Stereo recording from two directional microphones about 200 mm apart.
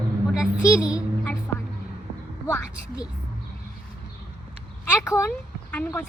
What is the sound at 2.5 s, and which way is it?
Speech, 15° left (ahead or behind).